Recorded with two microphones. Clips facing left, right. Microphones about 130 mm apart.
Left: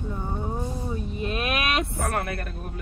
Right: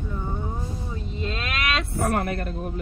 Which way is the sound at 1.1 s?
15° left (ahead or behind).